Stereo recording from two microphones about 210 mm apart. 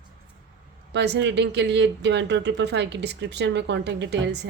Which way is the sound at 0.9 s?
55° right (ahead or behind).